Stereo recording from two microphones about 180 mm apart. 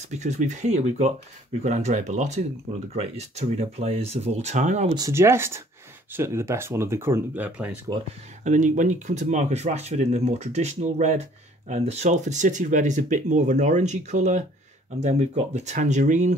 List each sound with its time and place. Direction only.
0.1 s speech: 40° right (ahead or behind)
4.9 s speech: 15° right (ahead or behind)
8.5 s speech: 45° right (ahead or behind)